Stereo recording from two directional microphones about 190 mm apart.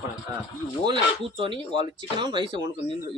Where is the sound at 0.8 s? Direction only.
25° right (ahead or behind).